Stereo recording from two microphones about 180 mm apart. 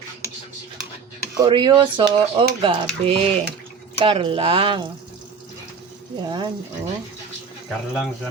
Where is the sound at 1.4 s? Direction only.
25° right (ahead or behind).